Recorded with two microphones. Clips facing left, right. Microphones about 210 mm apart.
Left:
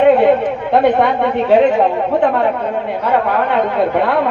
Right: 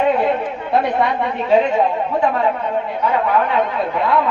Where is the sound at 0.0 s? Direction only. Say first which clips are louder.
Left 7 dB; 60° left (ahead or behind).